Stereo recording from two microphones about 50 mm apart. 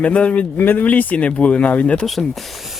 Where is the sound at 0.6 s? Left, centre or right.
Left.